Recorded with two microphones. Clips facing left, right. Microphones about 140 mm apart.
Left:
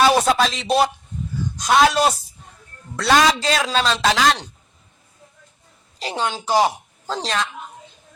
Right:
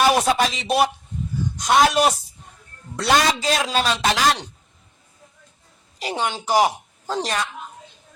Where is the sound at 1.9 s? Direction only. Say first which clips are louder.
Even; 20° right (ahead or behind).